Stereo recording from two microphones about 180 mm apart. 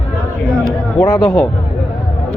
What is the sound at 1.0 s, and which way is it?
Speech, 15° left (ahead or behind).